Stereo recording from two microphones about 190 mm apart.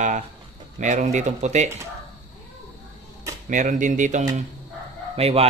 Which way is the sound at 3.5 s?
40° right (ahead or behind).